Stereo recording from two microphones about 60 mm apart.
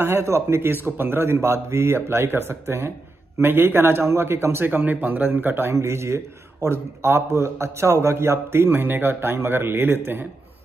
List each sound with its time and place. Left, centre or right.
0.0 s a man's voice: right
4.6 s a man's voice: right
5.7 s speech: right